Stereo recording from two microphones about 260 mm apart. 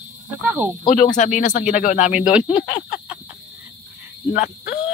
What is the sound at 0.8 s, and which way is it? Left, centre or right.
Speech, left.